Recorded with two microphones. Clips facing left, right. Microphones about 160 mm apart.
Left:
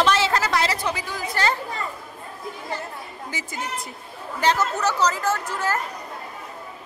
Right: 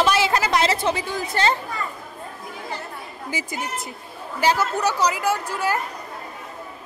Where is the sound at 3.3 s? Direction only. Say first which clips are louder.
Right 3 dB; 10° right (ahead or behind).